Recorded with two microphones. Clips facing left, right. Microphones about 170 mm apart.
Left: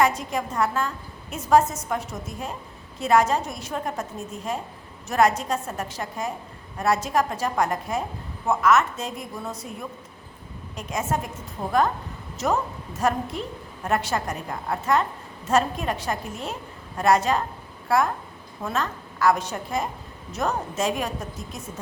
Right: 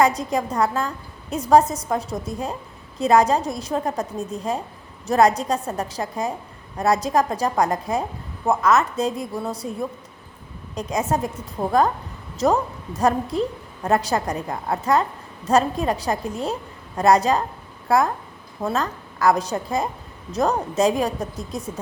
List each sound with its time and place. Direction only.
0.0 s a woman's voice: 35° right (ahead or behind)
10.8 s a woman's voice: 35° right (ahead or behind)